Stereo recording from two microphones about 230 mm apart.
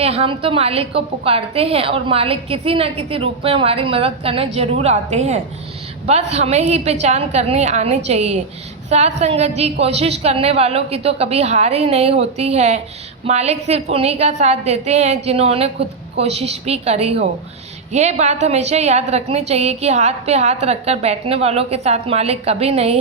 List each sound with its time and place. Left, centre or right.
0.0 s a woman's voice: right